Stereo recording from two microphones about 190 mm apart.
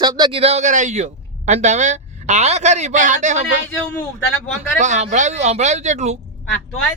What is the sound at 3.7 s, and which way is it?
Speech, 10° left (ahead or behind).